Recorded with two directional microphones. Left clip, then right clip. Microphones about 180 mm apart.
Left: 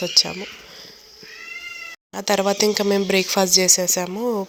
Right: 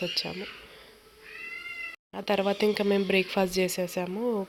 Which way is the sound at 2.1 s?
15° left (ahead or behind).